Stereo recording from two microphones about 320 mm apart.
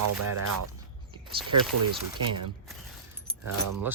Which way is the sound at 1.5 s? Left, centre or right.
Right.